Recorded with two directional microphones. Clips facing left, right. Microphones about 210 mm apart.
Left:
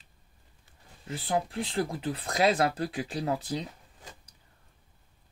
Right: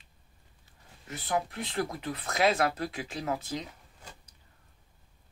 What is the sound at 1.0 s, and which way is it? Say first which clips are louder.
Speech: left 2 dB; 30° left (ahead or behind).